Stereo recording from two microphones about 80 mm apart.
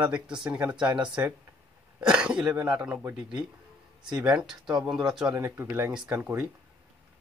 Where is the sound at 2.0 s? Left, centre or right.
Centre.